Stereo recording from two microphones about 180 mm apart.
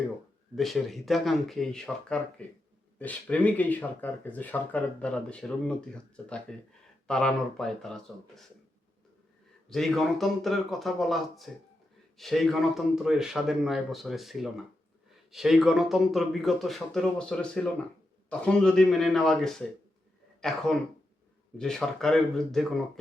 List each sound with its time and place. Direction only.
0.5 s speech: centre (ahead or behind)
9.6 s speech: centre (ahead or behind)